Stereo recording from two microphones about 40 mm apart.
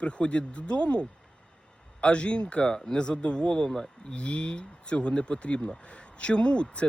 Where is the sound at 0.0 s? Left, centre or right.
Left.